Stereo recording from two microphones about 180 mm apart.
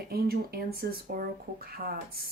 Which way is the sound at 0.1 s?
60° right (ahead or behind).